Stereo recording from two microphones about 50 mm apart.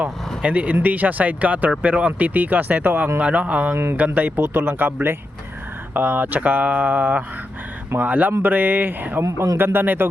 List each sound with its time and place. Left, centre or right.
0.4 s speech: right
5.9 s speech: right